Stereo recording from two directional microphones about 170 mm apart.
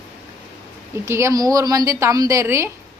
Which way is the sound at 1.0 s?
15° right (ahead or behind).